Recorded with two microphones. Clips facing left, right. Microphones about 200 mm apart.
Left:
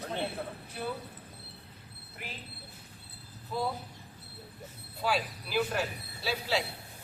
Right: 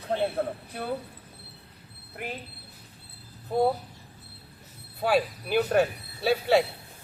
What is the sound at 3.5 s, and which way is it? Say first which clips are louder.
Speech: right 9 dB; 60° right (ahead or behind).